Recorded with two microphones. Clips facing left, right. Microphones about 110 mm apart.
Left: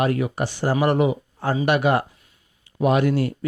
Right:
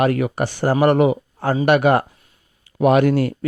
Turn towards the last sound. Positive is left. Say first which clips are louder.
# right 4 dB
turn(degrees=-60)  # may be behind; listen again after turning